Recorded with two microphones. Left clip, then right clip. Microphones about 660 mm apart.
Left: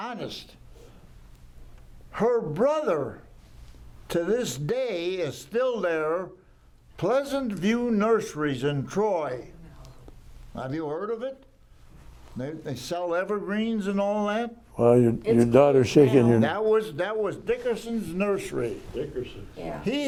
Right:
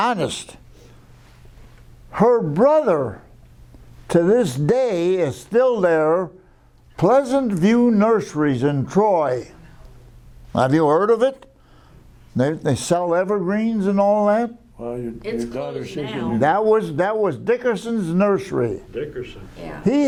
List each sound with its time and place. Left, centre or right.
0.0 s speech: right
2.0 s speech: right
10.5 s speech: right
14.8 s speech: left
16.4 s speech: right
19.8 s speech: right